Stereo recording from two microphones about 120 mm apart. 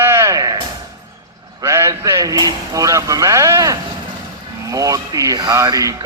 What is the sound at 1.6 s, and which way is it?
Speech, 20° right (ahead or behind).